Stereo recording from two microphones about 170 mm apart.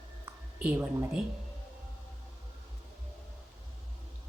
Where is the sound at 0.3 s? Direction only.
10° right (ahead or behind).